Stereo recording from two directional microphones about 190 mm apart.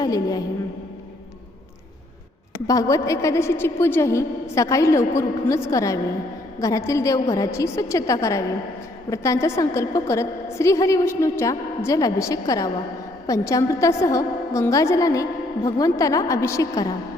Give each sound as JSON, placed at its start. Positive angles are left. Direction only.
{"t": 0.0, "sound": "a woman's voice", "side_deg": 20}
{"t": 2.6, "sound": "a woman's voice", "side_deg": 15}